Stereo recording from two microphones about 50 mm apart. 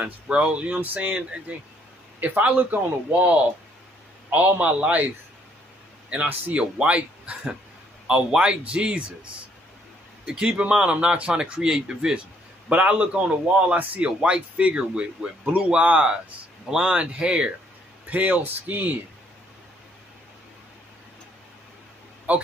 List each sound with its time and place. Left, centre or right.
0.0 s a man's voice: right
6.5 s a man's voice: right
12.6 s a man's voice: right
18.1 s speech: right
22.3 s a man's voice: right